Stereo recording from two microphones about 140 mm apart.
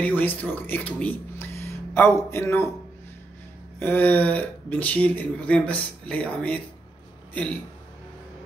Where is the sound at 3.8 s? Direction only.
15° left (ahead or behind).